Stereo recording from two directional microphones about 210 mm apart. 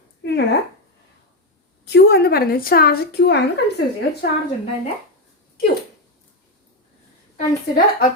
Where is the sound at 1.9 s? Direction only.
50° left (ahead or behind).